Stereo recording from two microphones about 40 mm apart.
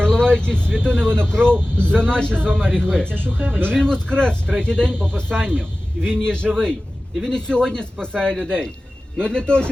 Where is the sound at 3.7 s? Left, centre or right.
Left.